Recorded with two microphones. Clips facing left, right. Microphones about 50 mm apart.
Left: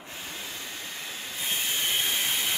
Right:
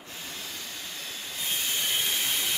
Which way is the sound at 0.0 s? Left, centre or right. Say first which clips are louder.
Left 1 dB; left.